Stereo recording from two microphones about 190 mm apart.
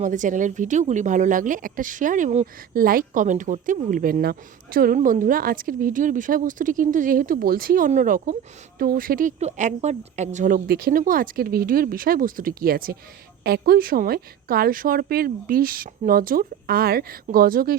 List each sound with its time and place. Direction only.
0.0 s speech: 40° right (ahead or behind)